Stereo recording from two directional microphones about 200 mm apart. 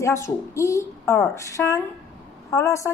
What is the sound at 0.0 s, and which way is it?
A woman's voice, 15° left (ahead or behind).